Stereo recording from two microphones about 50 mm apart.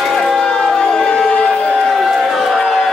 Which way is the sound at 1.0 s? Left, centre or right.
Centre.